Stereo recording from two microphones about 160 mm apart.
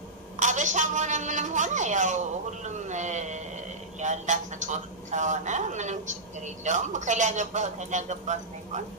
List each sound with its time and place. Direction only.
0.4 s a man's voice: 50° right (ahead or behind)